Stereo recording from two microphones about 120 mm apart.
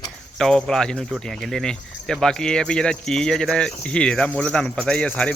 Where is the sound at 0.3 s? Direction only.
5° left (ahead or behind).